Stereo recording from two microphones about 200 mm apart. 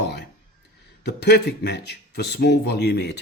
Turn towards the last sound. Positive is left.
turn(degrees=55)  # may be behind; listen again after turning